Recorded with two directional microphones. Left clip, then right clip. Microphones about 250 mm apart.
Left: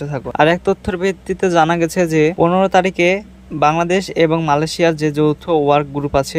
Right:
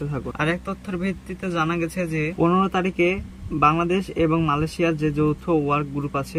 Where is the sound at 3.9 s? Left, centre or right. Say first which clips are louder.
Left 7 dB; centre.